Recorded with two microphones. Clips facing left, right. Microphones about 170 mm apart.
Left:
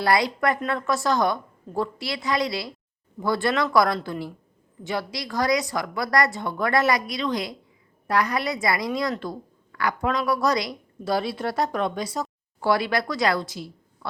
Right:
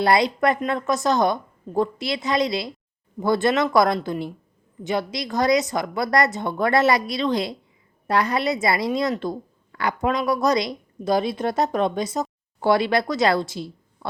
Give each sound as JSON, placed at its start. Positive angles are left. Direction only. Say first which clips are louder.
{"t": 0.0, "sound": "a woman's voice", "louder": "right 3 dB", "side_deg": -25}